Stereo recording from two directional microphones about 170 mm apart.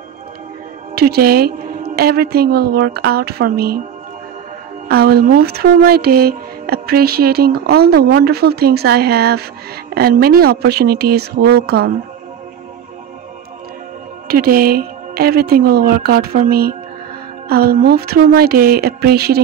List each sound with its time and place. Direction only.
0.9 s speech: 65° right (ahead or behind)
4.8 s speech: 65° right (ahead or behind)
14.2 s speech: 60° right (ahead or behind)